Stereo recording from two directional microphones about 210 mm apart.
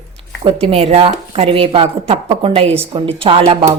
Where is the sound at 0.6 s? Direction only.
30° right (ahead or behind).